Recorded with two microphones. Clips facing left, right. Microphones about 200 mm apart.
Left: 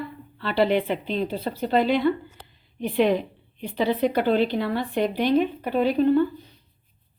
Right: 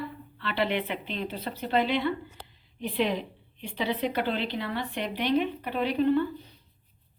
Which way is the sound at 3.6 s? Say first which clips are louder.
Left 7 dB; 40° left (ahead or behind).